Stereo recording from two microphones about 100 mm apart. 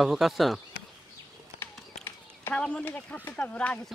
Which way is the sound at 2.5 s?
10° left (ahead or behind).